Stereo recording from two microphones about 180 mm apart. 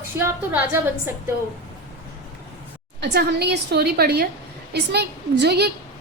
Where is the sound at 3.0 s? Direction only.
65° right (ahead or behind).